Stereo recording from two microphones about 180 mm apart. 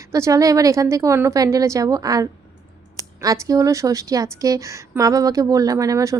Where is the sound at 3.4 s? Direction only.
20° right (ahead or behind).